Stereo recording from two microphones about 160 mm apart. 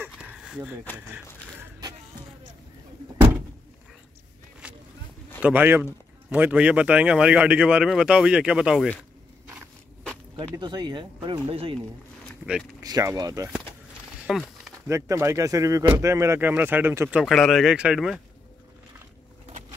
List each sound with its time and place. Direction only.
0.0 s a sound: 10° right (ahead or behind)
4.6 s vehicle: 5° right (ahead or behind)
5.4 s a man's voice: 10° right (ahead or behind)
10.5 s speech: 25° right (ahead or behind)
12.8 s speech: 25° right (ahead or behind)
14.2 s a sound: 5° right (ahead or behind)
14.9 s a man's voice: 20° right (ahead or behind)
17.2 s speech: centre (ahead or behind)